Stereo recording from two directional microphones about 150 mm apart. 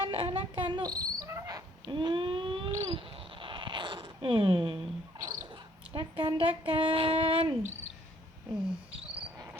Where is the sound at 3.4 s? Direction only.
35° right (ahead or behind).